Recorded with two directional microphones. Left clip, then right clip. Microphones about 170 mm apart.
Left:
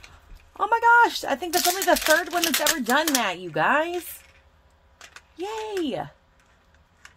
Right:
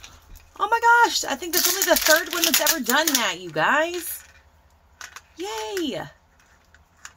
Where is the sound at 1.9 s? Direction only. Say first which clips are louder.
Right 1 dB; 25° left (ahead or behind).